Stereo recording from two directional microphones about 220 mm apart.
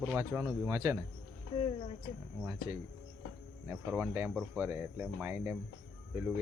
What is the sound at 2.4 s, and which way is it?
Speech, 10° right (ahead or behind).